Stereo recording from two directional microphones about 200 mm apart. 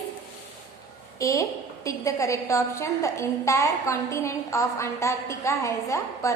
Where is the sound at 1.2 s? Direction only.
15° left (ahead or behind).